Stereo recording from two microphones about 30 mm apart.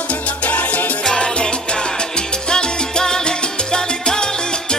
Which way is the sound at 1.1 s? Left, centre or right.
Left.